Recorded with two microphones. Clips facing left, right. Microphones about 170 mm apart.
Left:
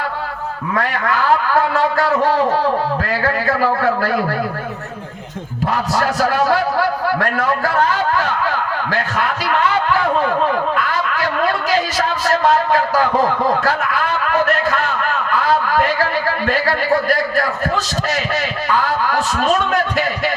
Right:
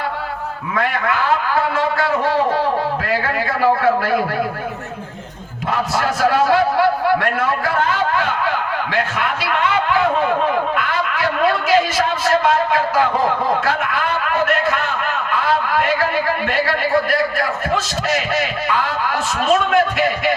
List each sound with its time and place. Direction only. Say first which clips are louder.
6.0 s a man's voice: right 1 dB; 40° left (ahead or behind)
8.9 s a man's voice: left 1 dB; 40° left (ahead or behind)
16.5 s a man's voice: left 4 dB; 40° left (ahead or behind)